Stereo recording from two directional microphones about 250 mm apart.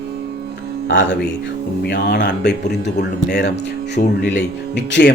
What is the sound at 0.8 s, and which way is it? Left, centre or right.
Speech, left.